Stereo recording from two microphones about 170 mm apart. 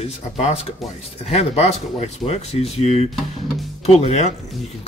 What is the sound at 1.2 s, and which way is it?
Speech, 40° left (ahead or behind).